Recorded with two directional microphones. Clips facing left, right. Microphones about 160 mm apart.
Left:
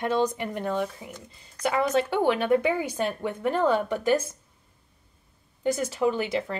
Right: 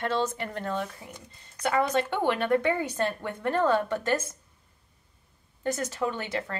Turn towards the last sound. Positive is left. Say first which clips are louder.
# left 5 dB
turn(degrees=10)  # may be behind; listen again after turning